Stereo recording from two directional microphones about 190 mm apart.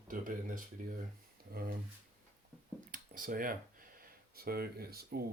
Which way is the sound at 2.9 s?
45° right (ahead or behind).